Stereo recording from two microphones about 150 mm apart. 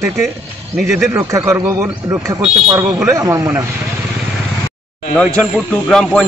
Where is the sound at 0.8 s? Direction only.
5° right (ahead or behind).